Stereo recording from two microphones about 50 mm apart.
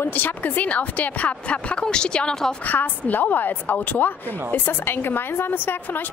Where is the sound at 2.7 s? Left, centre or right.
Left.